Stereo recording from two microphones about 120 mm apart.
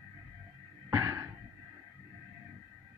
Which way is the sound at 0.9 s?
25° right (ahead or behind).